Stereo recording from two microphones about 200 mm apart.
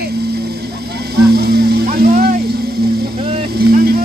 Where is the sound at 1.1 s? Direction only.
55° right (ahead or behind).